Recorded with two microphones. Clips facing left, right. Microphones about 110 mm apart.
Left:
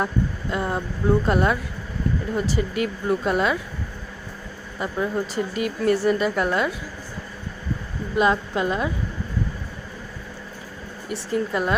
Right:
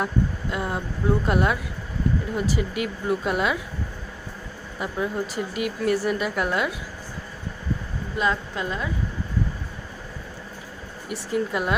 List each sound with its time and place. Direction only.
0.5 s speech: 5° right (ahead or behind)
4.8 s speech: 5° right (ahead or behind)
8.2 s a woman's voice: 15° left (ahead or behind)
11.1 s speech: 10° right (ahead or behind)